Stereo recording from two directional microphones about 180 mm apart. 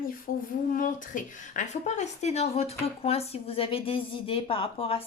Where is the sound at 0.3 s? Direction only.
55° left (ahead or behind).